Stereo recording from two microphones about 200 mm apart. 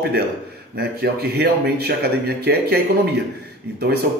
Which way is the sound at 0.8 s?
50° right (ahead or behind).